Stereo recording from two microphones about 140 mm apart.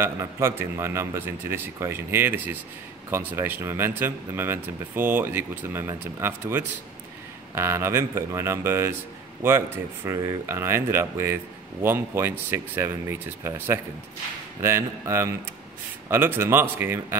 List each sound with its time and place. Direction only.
0.0 s speech: 20° right (ahead or behind)
10.0 s speech: 20° right (ahead or behind)